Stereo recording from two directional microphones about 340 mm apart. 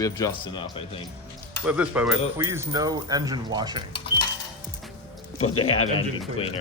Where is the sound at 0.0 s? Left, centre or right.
Centre.